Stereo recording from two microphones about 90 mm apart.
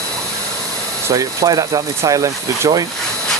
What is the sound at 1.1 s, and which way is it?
Speech, 40° right (ahead or behind).